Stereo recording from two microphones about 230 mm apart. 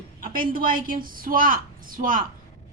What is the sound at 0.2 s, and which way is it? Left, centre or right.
A woman's voice, right.